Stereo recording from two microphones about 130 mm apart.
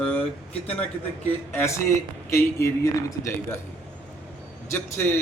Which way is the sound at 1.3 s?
15° left (ahead or behind).